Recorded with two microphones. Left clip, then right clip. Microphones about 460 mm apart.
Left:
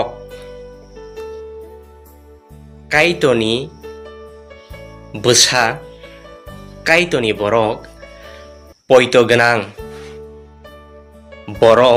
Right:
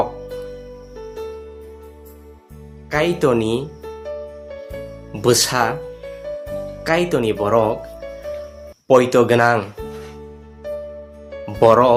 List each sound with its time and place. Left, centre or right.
2.9 s speech: right
5.2 s speech: right
6.8 s speech: right
8.9 s speech: right
11.6 s speech: right